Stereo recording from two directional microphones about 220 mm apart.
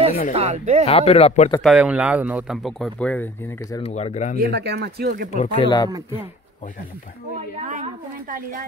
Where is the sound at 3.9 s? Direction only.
35° left (ahead or behind).